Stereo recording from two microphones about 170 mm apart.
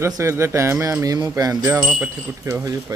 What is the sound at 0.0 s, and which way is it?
Speech, 15° right (ahead or behind).